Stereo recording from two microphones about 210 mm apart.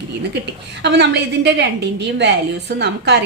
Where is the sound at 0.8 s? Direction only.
55° right (ahead or behind).